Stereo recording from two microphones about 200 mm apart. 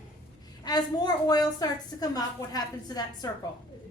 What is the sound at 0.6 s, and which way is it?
A woman's voice, 20° left (ahead or behind).